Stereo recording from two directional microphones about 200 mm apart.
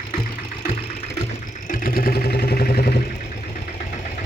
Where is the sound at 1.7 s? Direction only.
45° left (ahead or behind).